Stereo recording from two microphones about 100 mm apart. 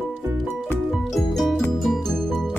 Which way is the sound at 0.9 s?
Centre (ahead or behind).